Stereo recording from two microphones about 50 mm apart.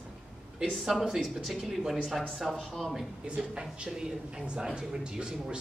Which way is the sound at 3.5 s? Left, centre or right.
Right.